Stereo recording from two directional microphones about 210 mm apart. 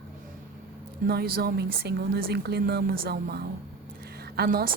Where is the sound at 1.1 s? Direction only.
45° right (ahead or behind).